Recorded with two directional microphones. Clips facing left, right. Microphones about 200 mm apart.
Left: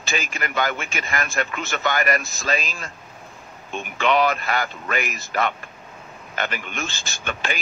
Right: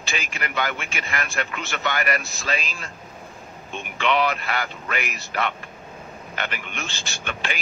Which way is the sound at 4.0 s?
45° left (ahead or behind).